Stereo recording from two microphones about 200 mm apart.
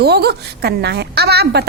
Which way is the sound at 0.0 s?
55° right (ahead or behind).